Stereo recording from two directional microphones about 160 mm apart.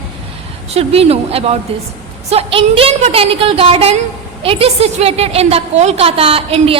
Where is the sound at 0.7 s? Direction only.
40° right (ahead or behind).